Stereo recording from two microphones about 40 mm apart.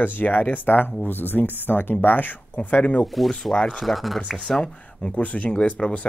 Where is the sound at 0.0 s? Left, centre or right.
Left.